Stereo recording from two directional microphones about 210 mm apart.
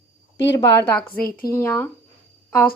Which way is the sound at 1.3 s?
45° left (ahead or behind).